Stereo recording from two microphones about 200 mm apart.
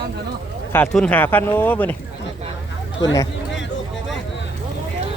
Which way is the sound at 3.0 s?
20° left (ahead or behind).